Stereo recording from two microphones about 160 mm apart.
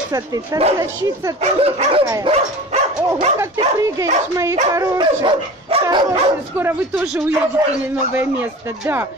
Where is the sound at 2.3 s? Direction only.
45° right (ahead or behind).